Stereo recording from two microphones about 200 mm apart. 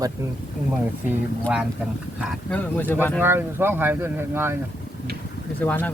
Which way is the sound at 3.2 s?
10° right (ahead or behind).